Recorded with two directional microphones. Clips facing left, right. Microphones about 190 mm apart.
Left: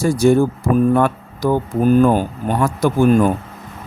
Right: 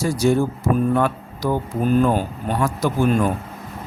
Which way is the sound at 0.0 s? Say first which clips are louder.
Left 5 dB; 50° left (ahead or behind).